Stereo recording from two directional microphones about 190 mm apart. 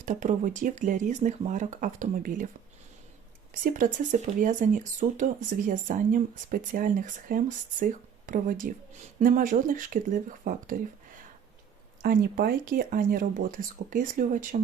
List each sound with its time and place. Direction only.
0.0 s speech: 40° right (ahead or behind)
3.6 s speech: 40° right (ahead or behind)
12.0 s speech: 50° right (ahead or behind)